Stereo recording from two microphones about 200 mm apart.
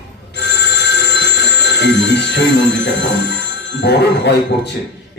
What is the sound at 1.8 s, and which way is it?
Telephone bell ringing, 60° left (ahead or behind).